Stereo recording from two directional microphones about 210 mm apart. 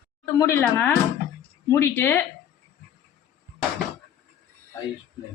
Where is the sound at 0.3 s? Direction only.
15° left (ahead or behind).